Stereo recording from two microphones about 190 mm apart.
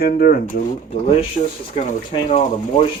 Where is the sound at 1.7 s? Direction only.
35° left (ahead or behind).